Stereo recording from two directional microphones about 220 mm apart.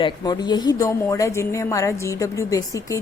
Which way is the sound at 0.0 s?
20° left (ahead or behind).